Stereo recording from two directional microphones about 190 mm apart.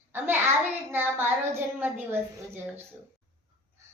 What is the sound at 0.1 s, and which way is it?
A child's voice, 10° right (ahead or behind).